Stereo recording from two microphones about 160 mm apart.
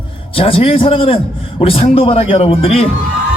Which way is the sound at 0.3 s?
35° left (ahead or behind).